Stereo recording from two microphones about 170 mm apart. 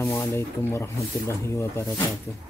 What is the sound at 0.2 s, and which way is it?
Speech, 15° left (ahead or behind).